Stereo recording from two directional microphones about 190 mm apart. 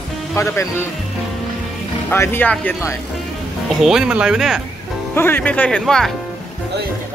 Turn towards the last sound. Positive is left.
turn(degrees=5)  # may be behind; listen again after turning